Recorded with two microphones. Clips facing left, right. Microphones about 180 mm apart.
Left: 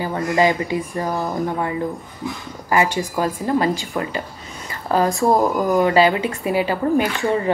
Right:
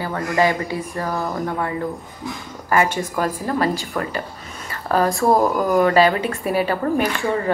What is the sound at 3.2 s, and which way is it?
Speech, 20° left (ahead or behind).